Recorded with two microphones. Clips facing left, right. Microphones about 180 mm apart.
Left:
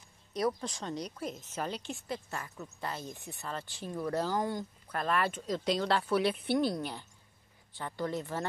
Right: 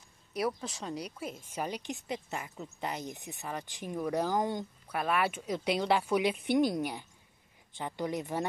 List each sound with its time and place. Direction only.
0.3 s a woman's voice: 5° right (ahead or behind)